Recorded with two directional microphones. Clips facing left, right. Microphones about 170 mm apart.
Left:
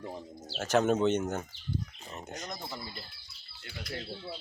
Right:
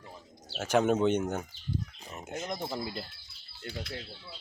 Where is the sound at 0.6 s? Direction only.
10° right (ahead or behind).